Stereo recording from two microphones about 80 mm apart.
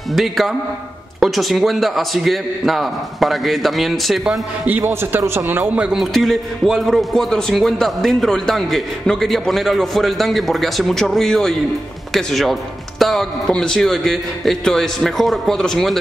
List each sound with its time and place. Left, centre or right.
0.1 s a man's voice: centre
4.6 s a man's voice: right
5.8 s a man's voice: centre
6.1 s a man's voice: centre